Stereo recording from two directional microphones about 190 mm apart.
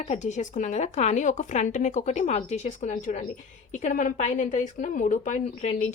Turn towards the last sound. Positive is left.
turn(degrees=35)  # may be behind; listen again after turning